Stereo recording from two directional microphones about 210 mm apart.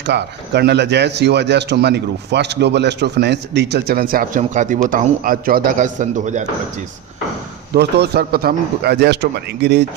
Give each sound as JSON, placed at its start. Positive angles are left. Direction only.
{"t": 0.0, "sound": "speech", "side_deg": -55}
{"t": 7.7, "sound": "speech", "side_deg": -50}